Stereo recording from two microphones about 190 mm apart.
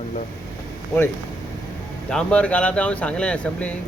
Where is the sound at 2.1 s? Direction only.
5° left (ahead or behind).